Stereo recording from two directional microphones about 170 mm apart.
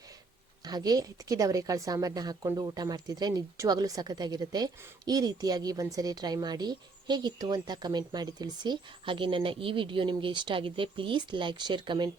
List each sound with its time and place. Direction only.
0.6 s speech: 25° right (ahead or behind)